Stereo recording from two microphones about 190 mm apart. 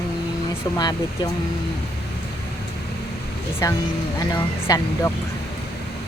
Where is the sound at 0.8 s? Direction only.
20° left (ahead or behind).